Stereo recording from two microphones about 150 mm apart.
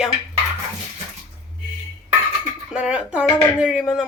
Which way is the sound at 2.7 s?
5° right (ahead or behind).